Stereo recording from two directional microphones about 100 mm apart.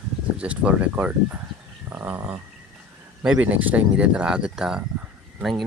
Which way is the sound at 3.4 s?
15° right (ahead or behind).